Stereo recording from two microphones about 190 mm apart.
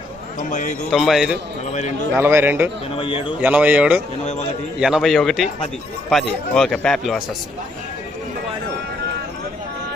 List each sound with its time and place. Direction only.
0.3 s speech: 40° left (ahead or behind)
0.9 s speech: centre (ahead or behind)
2.9 s a man's voice: 30° left (ahead or behind)
3.4 s speech: 10° right (ahead or behind)